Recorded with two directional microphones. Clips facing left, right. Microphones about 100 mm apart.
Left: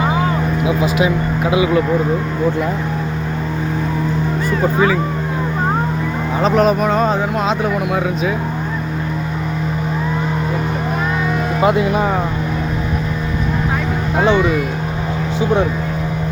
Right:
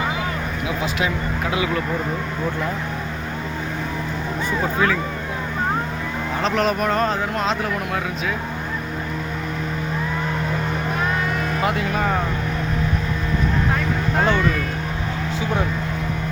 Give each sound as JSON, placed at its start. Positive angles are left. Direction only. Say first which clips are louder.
{"t": 0.9, "sound": "speech", "louder": "left 7 dB", "side_deg": 15}
{"t": 4.6, "sound": "speech", "louder": "left 6 dB", "side_deg": 5}
{"t": 6.4, "sound": "speech", "louder": "left 7 dB", "side_deg": 10}
{"t": 11.6, "sound": "speech", "louder": "left 9 dB", "side_deg": 20}
{"t": 14.2, "sound": "speech", "louder": "left 6 dB", "side_deg": 10}